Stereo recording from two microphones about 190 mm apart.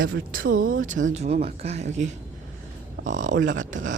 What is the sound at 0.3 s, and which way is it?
Speech, 45° right (ahead or behind).